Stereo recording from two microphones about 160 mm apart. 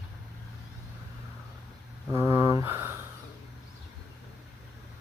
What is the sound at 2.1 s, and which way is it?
Speech, 15° right (ahead or behind).